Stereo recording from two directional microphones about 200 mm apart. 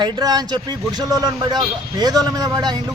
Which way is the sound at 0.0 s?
20° right (ahead or behind).